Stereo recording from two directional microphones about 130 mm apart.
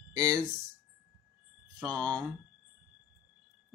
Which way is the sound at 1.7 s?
30° right (ahead or behind).